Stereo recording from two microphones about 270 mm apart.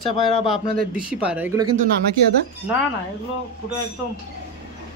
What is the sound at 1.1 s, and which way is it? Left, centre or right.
Speech, centre.